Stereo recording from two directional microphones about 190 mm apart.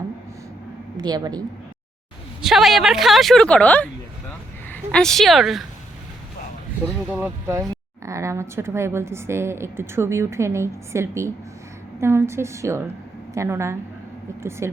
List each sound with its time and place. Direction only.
0.9 s a woman's voice: 20° right (ahead or behind)
2.4 s a woman's voice: centre (ahead or behind)
4.3 s a sound: 5° left (ahead or behind)
7.1 s speech: 10° right (ahead or behind)